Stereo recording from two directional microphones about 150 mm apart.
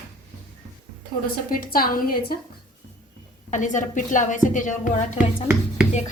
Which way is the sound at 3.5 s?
55° left (ahead or behind).